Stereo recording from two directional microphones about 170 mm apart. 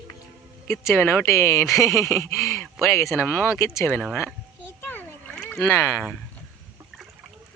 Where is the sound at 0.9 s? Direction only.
15° left (ahead or behind).